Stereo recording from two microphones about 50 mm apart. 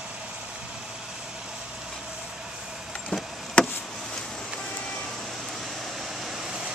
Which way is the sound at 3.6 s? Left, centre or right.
Left.